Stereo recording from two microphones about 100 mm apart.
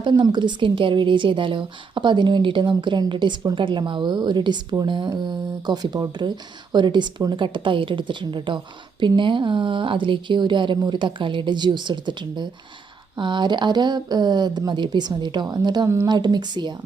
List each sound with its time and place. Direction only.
0.0 s a woman's voice: 45° right (ahead or behind)